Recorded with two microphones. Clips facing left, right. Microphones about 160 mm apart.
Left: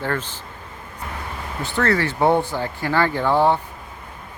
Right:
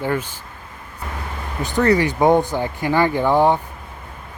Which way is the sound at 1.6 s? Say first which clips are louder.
Right 4 dB; 15° right (ahead or behind).